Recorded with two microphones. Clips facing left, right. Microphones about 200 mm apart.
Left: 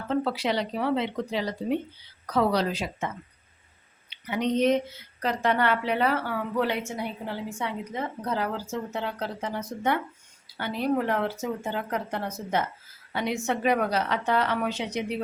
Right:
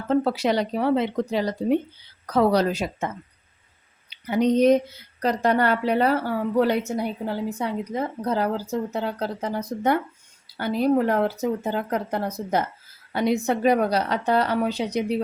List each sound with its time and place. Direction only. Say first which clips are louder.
0.1 s speech: right 5 dB; 45° right (ahead or behind)
4.1 s a woman's voice: right 6 dB; 40° right (ahead or behind)